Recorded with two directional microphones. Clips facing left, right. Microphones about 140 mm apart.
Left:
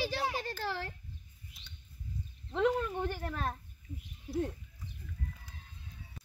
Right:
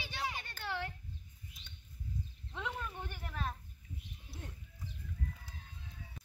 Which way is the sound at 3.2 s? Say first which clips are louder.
Left 5 dB; 55° left (ahead or behind).